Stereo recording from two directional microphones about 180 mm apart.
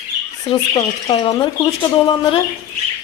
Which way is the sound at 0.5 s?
25° left (ahead or behind).